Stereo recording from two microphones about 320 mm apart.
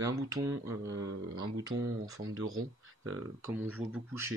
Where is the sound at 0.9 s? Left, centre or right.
Right.